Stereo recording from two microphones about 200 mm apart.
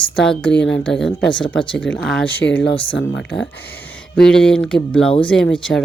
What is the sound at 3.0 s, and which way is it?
Speech, 65° left (ahead or behind).